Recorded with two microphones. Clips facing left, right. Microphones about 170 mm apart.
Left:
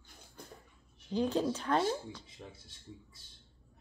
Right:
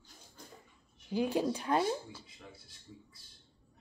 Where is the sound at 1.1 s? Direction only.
10° right (ahead or behind).